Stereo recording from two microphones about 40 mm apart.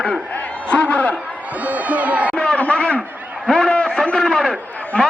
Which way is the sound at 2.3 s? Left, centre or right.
Left.